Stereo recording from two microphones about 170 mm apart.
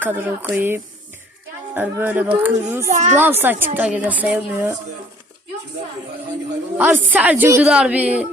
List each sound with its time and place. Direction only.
0.0 s a woman's voice: 10° right (ahead or behind)
2.9 s a child's voice: 45° right (ahead or behind)
3.2 s a woman's voice: 10° right (ahead or behind)
6.7 s a woman's voice: 10° right (ahead or behind)